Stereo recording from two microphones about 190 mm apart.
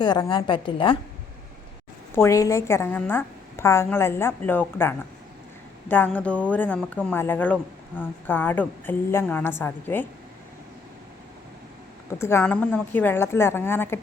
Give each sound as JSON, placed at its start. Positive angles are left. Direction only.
{"t": 0.0, "sound": "a woman's voice", "side_deg": 25}
{"t": 2.1, "sound": "speech", "side_deg": 15}
{"t": 12.2, "sound": "speech", "side_deg": 10}